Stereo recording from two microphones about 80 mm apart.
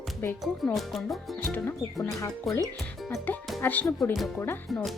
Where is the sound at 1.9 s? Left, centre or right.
Left.